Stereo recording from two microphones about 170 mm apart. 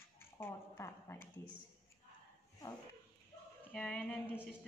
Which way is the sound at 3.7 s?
5° left (ahead or behind).